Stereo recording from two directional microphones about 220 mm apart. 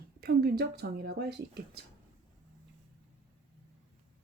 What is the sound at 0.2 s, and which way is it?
Speech, 45° right (ahead or behind).